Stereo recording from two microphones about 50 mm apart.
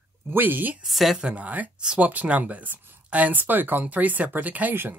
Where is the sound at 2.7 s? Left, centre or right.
Right.